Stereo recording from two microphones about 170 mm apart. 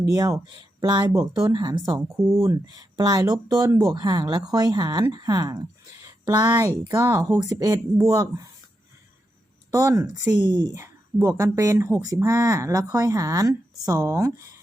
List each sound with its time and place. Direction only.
0.1 s speech: 20° right (ahead or behind)
9.7 s speech: 20° right (ahead or behind)